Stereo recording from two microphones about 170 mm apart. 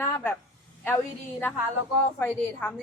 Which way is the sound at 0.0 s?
10° left (ahead or behind).